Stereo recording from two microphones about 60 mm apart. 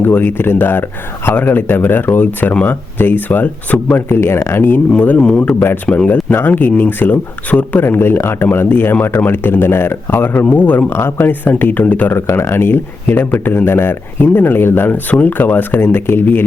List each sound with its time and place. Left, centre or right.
0.0 s speech: left
4.1 s speech: left
10.4 s speech: left
10.8 s speech: left
12.1 s speech: left